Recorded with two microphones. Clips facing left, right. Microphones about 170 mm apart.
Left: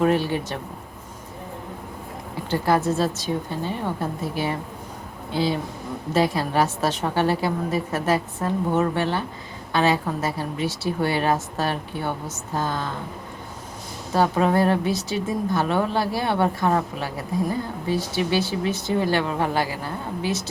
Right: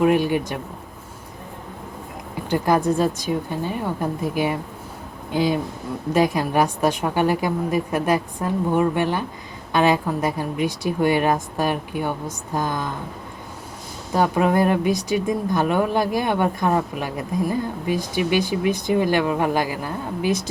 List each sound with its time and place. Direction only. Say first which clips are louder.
0.0 s a woman's voice: right 3 dB; 15° right (ahead or behind)
2.5 s a woman's voice: right 2 dB; 15° right (ahead or behind)
14.1 s a woman's voice: right 1 dB; 15° right (ahead or behind)